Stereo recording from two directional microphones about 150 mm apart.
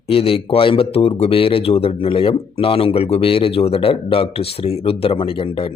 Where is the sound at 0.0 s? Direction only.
40° left (ahead or behind).